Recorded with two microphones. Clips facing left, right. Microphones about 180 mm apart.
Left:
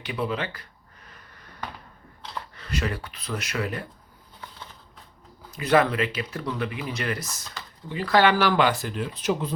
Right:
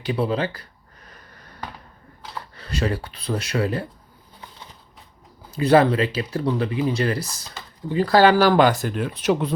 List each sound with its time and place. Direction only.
0.0 s speech: 30° right (ahead or behind)
2.6 s speech: 30° right (ahead or behind)
5.5 s speech: 30° right (ahead or behind)
9.1 s speech: 70° right (ahead or behind)